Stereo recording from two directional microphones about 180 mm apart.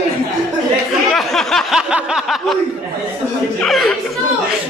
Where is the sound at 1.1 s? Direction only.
Centre (ahead or behind).